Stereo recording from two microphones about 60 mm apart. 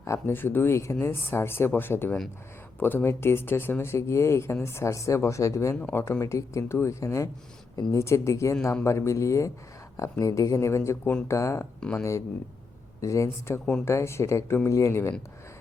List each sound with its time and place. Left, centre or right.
0.0 s a woman's voice: left
0.3 s a woman's voice: left
5.9 s a woman's voice: left
10.7 s speech: left
11.8 s speech: left
13.0 s a woman's voice: left